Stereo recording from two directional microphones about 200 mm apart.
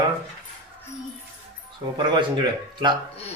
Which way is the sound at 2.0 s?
25° right (ahead or behind).